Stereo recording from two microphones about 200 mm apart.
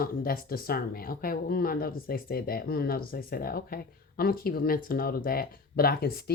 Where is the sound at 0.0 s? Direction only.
50° left (ahead or behind).